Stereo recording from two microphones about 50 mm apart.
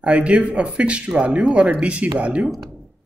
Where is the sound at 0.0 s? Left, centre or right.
Right.